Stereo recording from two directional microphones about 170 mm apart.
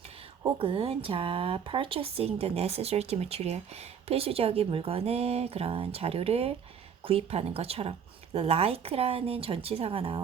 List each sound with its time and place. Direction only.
0.6 s speech: 35° right (ahead or behind)